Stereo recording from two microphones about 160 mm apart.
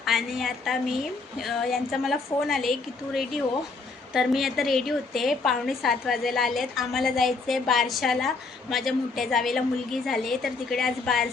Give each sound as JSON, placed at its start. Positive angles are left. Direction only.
{"t": 0.0, "sound": "a woman's voice", "side_deg": 0}